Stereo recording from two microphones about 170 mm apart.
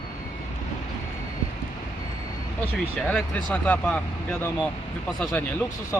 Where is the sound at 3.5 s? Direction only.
10° left (ahead or behind).